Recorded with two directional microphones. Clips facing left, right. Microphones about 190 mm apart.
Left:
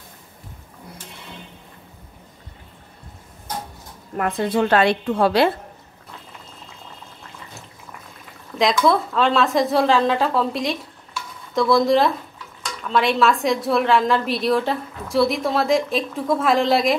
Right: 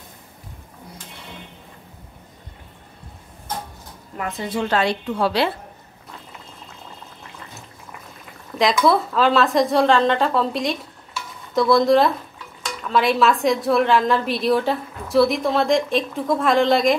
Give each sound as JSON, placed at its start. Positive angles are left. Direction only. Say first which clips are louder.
{"t": 4.2, "sound": "a woman's voice", "louder": "left 5 dB", "side_deg": 55}
{"t": 8.5, "sound": "a woman's voice", "louder": "even", "side_deg": 0}